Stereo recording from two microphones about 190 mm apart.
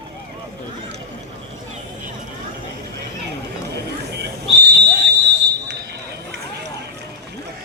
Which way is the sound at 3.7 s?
60° right (ahead or behind).